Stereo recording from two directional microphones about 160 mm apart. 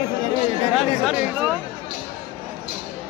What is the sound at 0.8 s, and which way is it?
Speech, 5° right (ahead or behind).